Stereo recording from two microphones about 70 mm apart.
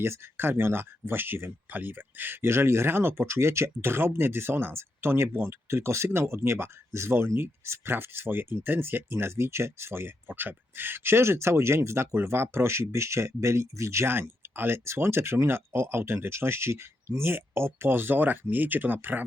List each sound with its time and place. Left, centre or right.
0.0 s speech: right